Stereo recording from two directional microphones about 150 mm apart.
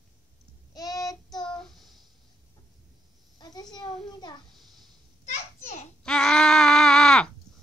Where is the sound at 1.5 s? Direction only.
Centre (ahead or behind).